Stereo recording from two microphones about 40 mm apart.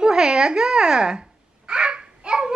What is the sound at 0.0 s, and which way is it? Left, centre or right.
Speech, right.